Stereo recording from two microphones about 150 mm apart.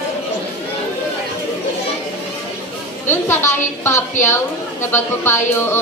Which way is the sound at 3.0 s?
15° left (ahead or behind).